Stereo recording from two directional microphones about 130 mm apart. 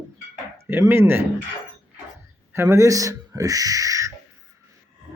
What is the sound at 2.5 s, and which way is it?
Speech, 20° right (ahead or behind).